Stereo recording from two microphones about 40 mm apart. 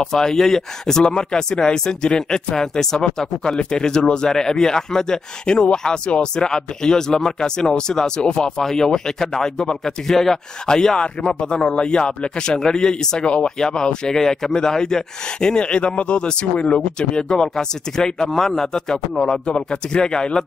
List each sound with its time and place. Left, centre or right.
0.0 s speech: centre
8.6 s speech: centre
17.2 s speech: centre